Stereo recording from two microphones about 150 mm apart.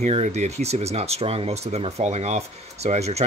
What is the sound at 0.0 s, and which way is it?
Speech, 45° right (ahead or behind).